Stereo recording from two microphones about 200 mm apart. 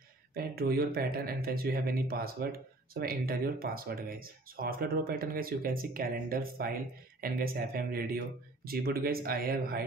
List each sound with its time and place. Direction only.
0.3 s speech: 50° right (ahead or behind)